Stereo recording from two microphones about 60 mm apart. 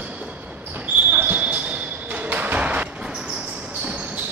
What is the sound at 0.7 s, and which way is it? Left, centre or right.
Basketball bounce, right.